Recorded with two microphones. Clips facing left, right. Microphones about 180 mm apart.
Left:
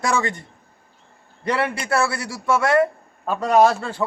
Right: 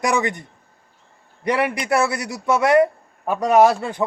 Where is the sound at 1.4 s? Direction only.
15° right (ahead or behind).